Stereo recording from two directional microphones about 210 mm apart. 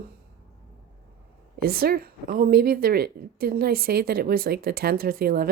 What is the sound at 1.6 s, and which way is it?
Speech, 45° right (ahead or behind).